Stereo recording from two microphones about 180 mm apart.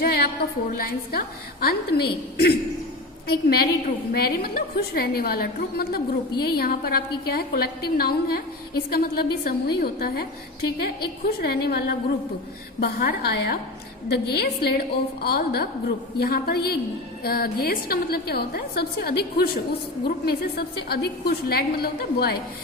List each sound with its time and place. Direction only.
0.0 s music: 55° left (ahead or behind)
0.7 s a woman's voice: 55° left (ahead or behind)